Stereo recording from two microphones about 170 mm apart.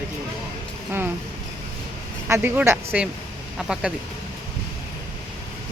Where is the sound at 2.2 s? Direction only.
10° right (ahead or behind).